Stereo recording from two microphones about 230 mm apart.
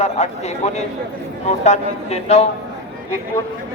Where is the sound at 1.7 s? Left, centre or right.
Left.